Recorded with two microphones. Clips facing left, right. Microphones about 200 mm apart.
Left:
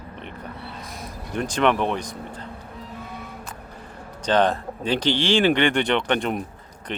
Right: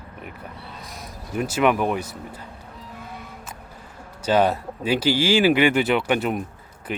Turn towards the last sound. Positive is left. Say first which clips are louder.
# right 2 dB
turn(degrees=-5)  # may be behind; listen again after turning